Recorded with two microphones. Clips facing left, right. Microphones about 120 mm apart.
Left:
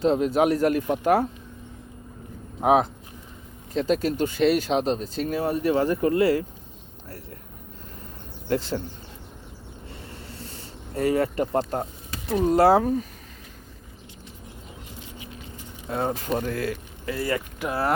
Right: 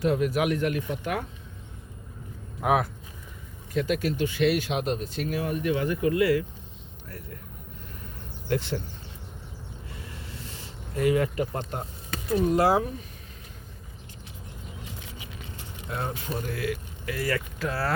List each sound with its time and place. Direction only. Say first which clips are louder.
0.0 s speech: left 4 dB; 25° left (ahead or behind)
2.6 s speech: left 5 dB; 25° left (ahead or behind)
3.8 s speech: left 3 dB; 35° left (ahead or behind)
8.4 s speech: left 3 dB; 35° left (ahead or behind)
9.9 s a sound: left 2 dB; 35° left (ahead or behind)
12.3 s speech: left 4 dB; 30° left (ahead or behind)
15.9 s speech: left 6 dB; 45° left (ahead or behind)
17.1 s speech: left 2 dB; 25° left (ahead or behind)